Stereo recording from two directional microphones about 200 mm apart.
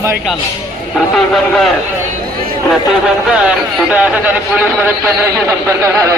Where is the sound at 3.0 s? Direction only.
5° right (ahead or behind).